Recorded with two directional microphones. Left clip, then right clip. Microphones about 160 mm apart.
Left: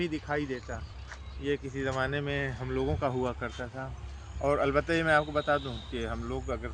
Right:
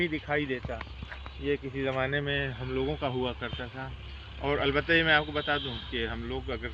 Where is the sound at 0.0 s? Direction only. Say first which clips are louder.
Right 3 dB; 35° right (ahead or behind).